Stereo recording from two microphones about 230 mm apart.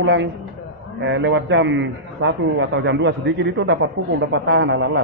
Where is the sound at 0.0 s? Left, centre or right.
Right.